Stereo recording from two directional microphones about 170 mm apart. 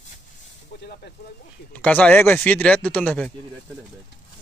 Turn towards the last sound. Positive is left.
turn(degrees=5)  # may be behind; listen again after turning